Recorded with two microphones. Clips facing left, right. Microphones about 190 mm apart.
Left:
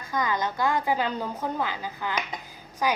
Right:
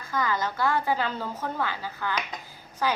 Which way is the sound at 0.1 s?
15° left (ahead or behind).